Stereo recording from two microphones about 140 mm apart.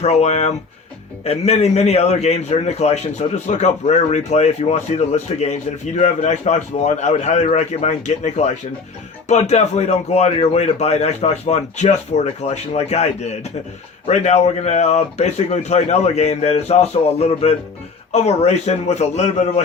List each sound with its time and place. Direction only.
0.0 s a man's voice: 50° left (ahead or behind)